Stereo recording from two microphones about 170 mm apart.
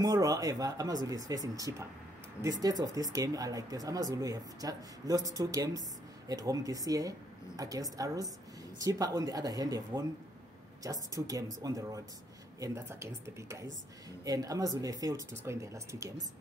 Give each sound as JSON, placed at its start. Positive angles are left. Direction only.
{"t": 0.0, "sound": "speech", "side_deg": -20}